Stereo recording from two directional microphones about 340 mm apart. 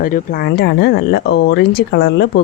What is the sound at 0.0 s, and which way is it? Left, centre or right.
Speech, left.